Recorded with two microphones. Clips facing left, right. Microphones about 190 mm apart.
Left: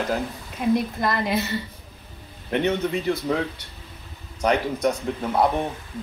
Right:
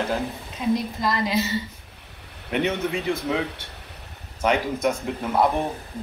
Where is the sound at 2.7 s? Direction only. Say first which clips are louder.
Left 2 dB; 70° right (ahead or behind).